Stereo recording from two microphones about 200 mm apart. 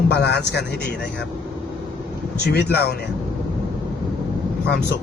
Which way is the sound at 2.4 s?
55° left (ahead or behind).